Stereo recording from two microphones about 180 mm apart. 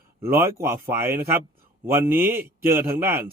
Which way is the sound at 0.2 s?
15° right (ahead or behind).